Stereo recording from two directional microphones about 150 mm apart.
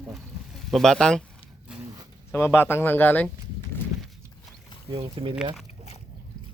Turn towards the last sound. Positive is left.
turn(degrees=-5)  # may be behind; listen again after turning